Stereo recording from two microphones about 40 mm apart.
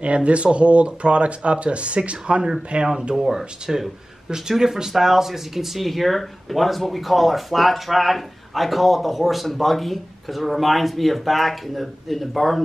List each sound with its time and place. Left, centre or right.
0.0 s speech: right
3.2 s speech: centre